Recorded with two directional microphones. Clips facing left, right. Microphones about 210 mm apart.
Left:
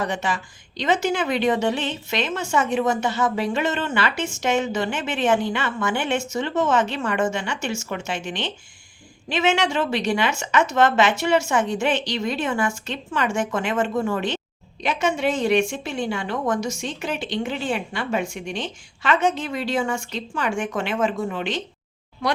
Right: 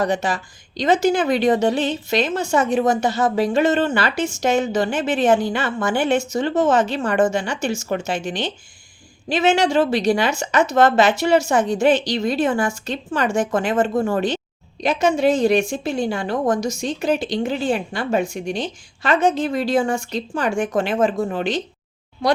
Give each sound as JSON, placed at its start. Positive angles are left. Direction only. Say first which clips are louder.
{"t": 0.0, "sound": "a woman's voice", "louder": "right 5 dB", "side_deg": -40}